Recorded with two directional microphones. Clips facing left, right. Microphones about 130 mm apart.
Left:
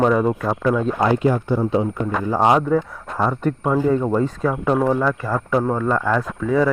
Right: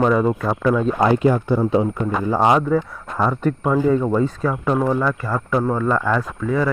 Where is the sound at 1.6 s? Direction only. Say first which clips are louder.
Right 2 dB; 90° right.